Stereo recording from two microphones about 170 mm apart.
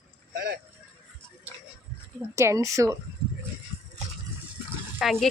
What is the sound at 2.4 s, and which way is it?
Speech, 20° right (ahead or behind).